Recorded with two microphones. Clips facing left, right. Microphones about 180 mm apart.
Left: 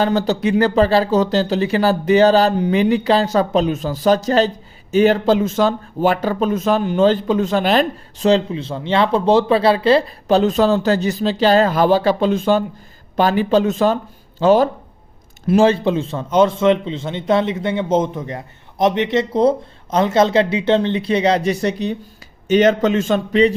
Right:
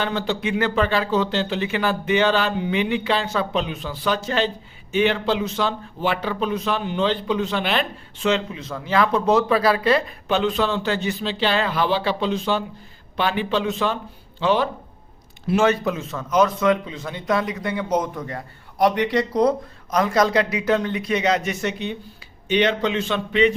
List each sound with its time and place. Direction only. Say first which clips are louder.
0.0 s a man's voice: left 7 dB; 40° left (ahead or behind)
15.6 s a man's voice: left 4 dB; 30° left (ahead or behind)